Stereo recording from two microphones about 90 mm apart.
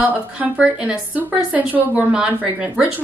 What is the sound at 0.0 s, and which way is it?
A woman's voice, 20° right (ahead or behind).